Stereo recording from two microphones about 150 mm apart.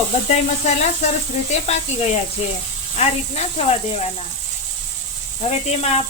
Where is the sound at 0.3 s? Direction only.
50° left (ahead or behind).